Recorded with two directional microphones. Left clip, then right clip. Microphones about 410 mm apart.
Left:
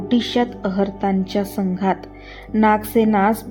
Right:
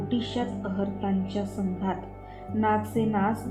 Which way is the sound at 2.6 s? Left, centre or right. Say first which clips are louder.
Left 10 dB; left.